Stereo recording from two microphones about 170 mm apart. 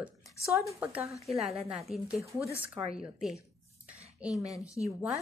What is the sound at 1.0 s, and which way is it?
A woman's voice, centre (ahead or behind).